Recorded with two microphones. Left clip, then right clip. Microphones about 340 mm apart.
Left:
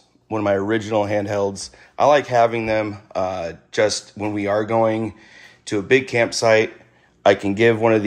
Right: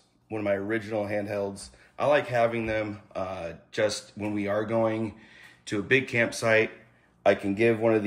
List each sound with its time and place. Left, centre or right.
0.3 s speech: left
0.7 s speech: centre
0.9 s speech: left
1.4 s speech: left